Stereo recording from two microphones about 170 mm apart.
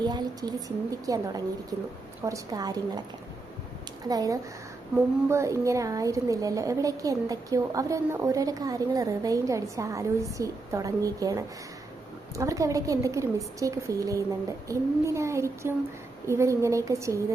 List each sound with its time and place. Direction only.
0.0 s a woman's voice: 25° right (ahead or behind)
4.0 s a woman's voice: 20° right (ahead or behind)